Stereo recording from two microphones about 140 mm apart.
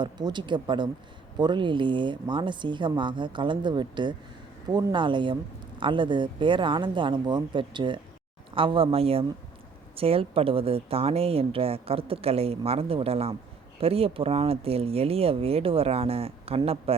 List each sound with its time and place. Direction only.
0.0 s a woman's voice: 30° right (ahead or behind)